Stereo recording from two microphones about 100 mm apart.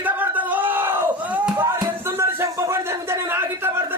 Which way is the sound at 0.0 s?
15° right (ahead or behind).